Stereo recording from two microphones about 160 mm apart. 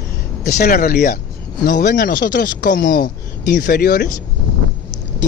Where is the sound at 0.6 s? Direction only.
75° left (ahead or behind).